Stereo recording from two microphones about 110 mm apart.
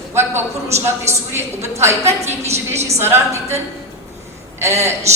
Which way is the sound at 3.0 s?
20° right (ahead or behind).